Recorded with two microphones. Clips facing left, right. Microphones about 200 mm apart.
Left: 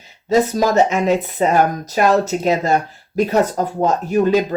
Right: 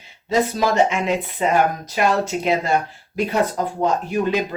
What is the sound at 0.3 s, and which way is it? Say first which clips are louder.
Speech: left 4 dB; 45° left (ahead or behind).